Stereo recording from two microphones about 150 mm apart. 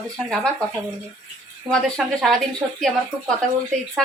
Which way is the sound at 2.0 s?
Centre (ahead or behind).